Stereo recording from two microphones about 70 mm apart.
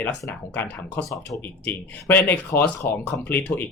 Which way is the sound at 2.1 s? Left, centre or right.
Left.